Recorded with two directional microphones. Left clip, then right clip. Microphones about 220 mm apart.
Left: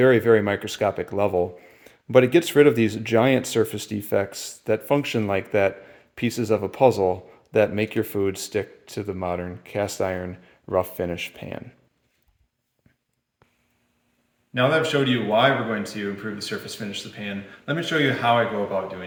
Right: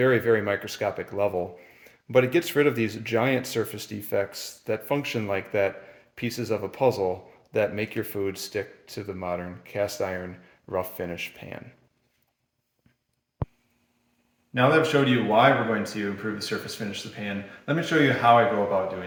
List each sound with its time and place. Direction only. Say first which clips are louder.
0.0 s speech: left 5 dB; 45° left (ahead or behind)
14.5 s speech: even; centre (ahead or behind)